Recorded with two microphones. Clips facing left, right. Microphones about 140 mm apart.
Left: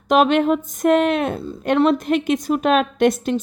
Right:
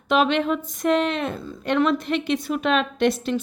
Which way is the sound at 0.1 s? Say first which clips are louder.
Left 5 dB; 45° left (ahead or behind).